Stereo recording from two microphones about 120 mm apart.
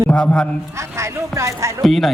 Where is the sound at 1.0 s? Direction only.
25° right (ahead or behind).